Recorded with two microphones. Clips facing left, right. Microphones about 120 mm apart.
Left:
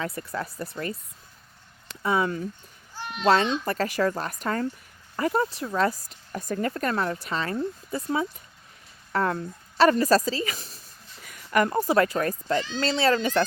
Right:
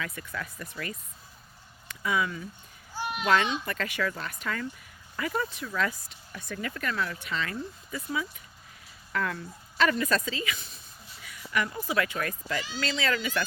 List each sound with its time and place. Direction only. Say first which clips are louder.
0.0 s speech: left 6 dB; 35° left (ahead or behind)
2.0 s speech: left 5 dB; 35° left (ahead or behind)
2.9 s children playing: right 3 dB; 10° right (ahead or behind)
3.2 s speech: left 5 dB; 30° left (ahead or behind)